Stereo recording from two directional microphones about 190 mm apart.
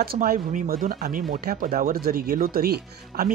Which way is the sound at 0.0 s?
50° right (ahead or behind).